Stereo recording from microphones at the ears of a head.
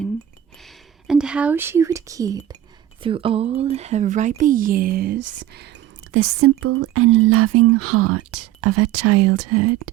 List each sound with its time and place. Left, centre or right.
1.4 s speech: right